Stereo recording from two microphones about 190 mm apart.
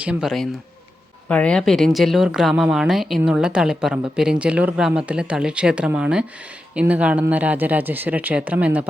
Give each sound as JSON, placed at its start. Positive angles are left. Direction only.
{"t": 0.0, "sound": "speech", "side_deg": -5}